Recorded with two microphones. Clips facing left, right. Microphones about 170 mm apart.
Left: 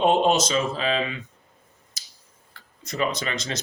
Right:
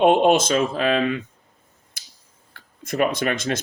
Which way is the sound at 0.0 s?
55° right (ahead or behind).